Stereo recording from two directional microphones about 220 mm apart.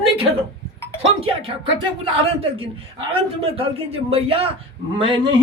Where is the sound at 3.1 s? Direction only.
25° right (ahead or behind).